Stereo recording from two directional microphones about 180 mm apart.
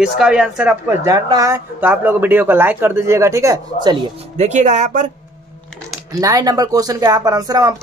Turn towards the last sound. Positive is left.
turn(degrees=-20)  # may be behind; listen again after turning